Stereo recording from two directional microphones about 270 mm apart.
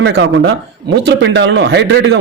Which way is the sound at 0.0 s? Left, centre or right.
Right.